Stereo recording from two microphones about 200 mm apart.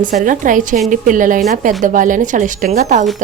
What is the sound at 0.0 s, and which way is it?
A woman's voice, 40° right (ahead or behind).